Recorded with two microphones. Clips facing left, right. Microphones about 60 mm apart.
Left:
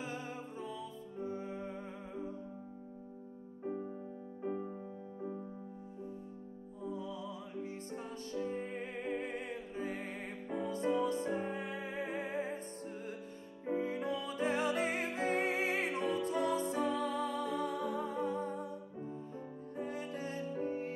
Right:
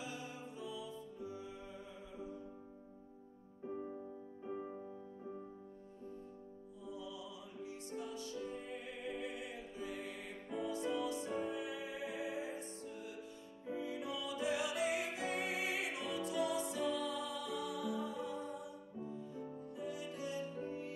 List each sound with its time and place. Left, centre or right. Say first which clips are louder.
0.0 s music: left 4 dB; left
6.8 s music: left 6 dB; left